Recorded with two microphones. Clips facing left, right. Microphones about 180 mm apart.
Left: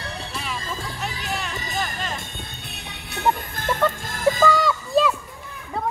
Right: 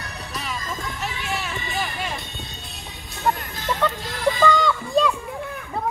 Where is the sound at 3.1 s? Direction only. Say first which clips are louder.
Left 1 dB; 55° left (ahead or behind).